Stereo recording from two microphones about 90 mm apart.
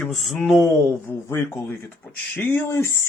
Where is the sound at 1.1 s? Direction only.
20° left (ahead or behind).